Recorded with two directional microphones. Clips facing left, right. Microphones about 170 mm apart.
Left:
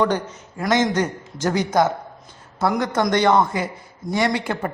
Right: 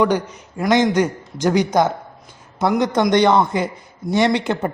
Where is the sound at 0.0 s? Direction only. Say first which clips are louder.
Right 3 dB; 15° right (ahead or behind).